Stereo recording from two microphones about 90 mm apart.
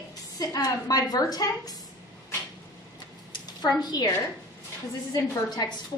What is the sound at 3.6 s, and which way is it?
Speech, 50° left (ahead or behind).